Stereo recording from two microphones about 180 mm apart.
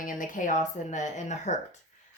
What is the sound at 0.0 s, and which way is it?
Speech, 50° left (ahead or behind).